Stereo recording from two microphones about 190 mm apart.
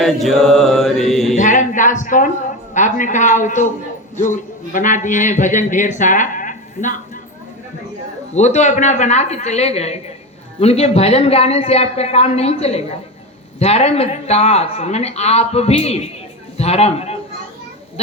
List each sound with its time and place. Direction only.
0.0 s mantra: centre (ahead or behind)
1.4 s speech: 40° left (ahead or behind)
4.7 s speech: 40° left (ahead or behind)
8.3 s speech: 35° left (ahead or behind)